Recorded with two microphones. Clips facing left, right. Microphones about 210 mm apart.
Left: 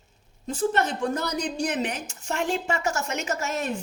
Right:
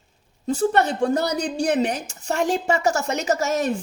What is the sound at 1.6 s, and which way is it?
Speech, 35° right (ahead or behind).